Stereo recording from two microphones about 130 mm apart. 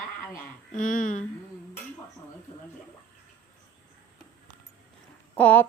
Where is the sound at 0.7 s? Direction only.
85° left.